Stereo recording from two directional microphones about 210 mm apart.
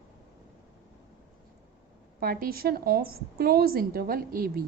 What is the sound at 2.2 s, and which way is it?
A woman's voice, 45° right (ahead or behind).